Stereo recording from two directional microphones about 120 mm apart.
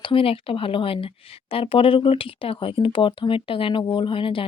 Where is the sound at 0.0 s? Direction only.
45° left (ahead or behind).